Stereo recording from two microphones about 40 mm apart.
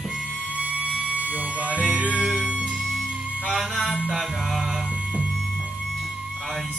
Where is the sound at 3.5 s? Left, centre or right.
Centre.